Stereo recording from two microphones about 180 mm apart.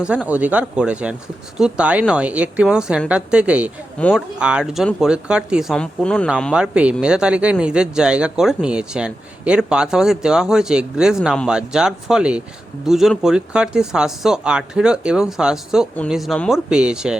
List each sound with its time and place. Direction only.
0.0 s a woman's voice: 5° right (ahead or behind)